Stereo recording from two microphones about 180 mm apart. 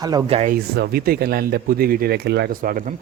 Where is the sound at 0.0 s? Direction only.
20° right (ahead or behind).